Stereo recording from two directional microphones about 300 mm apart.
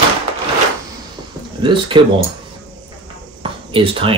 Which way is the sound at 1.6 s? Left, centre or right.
Centre.